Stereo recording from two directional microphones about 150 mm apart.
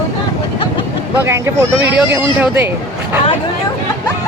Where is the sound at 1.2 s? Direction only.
20° right (ahead or behind).